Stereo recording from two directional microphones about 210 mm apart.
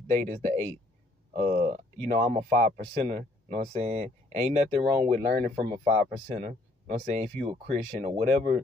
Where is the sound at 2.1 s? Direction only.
40° right (ahead or behind).